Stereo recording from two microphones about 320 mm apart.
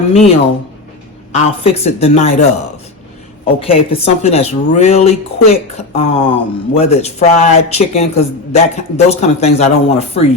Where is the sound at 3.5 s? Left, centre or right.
Centre.